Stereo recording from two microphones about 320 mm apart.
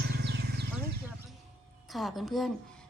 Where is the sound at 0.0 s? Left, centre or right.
Right.